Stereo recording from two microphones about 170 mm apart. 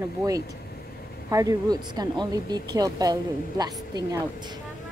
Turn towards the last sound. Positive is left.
turn(degrees=-25)  # may be behind; listen again after turning